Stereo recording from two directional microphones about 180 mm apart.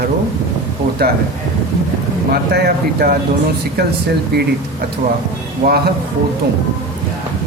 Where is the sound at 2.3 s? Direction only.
55° right (ahead or behind).